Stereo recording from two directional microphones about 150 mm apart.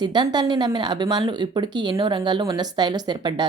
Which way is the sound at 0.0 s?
30° right (ahead or behind).